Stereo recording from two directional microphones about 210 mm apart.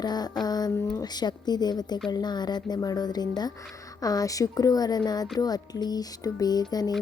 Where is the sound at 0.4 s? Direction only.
20° left (ahead or behind).